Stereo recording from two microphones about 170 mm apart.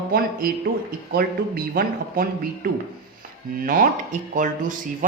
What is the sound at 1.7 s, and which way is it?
Speech, 60° right (ahead or behind).